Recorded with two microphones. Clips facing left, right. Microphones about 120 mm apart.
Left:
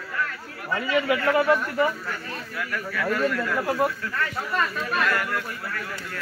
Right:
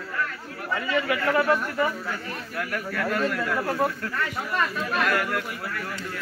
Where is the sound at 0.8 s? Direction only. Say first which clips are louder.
Left 3 dB; 20° left (ahead or behind).